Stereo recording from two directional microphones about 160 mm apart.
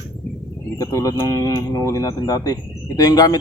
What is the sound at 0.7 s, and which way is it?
Speech, 20° left (ahead or behind).